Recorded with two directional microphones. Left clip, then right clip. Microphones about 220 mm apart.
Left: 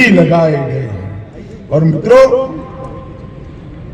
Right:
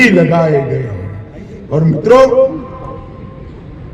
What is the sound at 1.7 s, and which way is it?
Speech, 40° right (ahead or behind).